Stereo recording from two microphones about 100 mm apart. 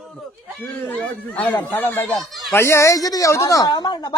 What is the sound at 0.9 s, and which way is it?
A woman's voice, 15° left (ahead or behind).